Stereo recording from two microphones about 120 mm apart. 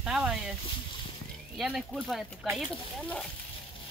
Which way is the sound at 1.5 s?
5° right (ahead or behind).